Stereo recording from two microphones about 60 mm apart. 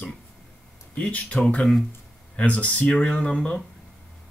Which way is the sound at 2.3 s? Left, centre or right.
Left.